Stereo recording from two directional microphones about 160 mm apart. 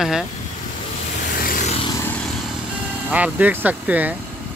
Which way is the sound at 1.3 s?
65° left (ahead or behind).